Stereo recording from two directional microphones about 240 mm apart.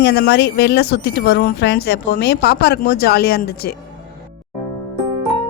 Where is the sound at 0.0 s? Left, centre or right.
Left.